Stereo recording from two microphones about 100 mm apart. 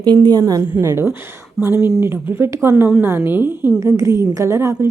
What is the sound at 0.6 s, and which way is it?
A woman's voice, 25° right (ahead or behind).